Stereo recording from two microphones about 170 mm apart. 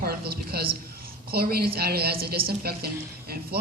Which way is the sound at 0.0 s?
65° right (ahead or behind).